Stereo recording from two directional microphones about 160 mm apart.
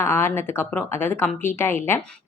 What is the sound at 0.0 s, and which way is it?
Speech, 15° left (ahead or behind).